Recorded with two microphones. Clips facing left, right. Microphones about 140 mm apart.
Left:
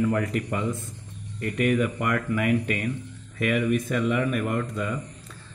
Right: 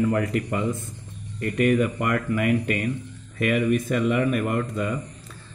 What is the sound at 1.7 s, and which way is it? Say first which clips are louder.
Speech: right 2 dB; 45° right (ahead or behind).